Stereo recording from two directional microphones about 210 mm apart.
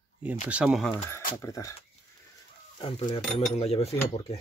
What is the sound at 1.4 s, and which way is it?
Speech, 15° left (ahead or behind).